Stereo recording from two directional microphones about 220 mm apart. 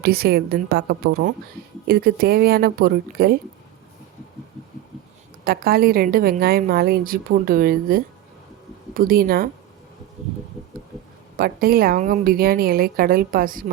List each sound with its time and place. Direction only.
0.0 s a woman's voice: 45° right (ahead or behind)
5.5 s a woman's voice: 45° right (ahead or behind)
11.3 s a woman's voice: 45° right (ahead or behind)